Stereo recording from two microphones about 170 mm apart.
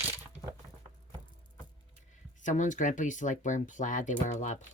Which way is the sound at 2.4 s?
45° left (ahead or behind).